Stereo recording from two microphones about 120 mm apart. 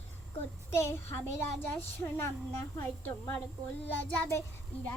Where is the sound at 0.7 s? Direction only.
20° left (ahead or behind).